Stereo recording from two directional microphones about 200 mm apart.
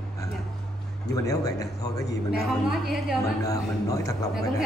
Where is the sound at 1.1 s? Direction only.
15° left (ahead or behind).